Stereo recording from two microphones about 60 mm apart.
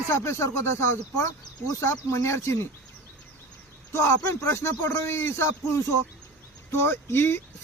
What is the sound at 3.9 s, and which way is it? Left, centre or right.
Speech, left.